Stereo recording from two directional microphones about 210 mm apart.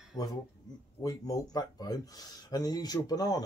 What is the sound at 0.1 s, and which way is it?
Speech, 25° left (ahead or behind).